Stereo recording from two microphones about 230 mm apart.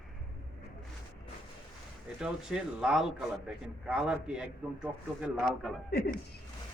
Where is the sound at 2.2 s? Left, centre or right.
Centre.